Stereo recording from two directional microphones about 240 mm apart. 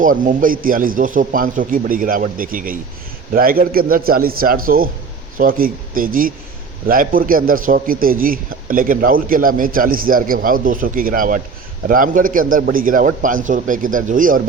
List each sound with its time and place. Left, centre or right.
0.0 s a man's voice: right